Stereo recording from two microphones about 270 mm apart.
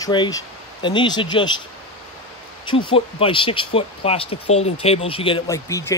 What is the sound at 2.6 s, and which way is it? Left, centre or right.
Speech, centre.